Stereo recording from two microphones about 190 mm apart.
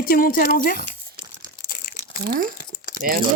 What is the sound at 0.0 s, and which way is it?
Speech, 50° left (ahead or behind).